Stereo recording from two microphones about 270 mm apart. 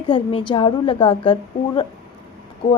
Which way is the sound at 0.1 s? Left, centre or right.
Centre.